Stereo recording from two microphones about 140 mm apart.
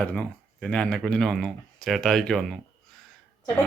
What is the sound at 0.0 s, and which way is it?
A man's voice, 10° left (ahead or behind).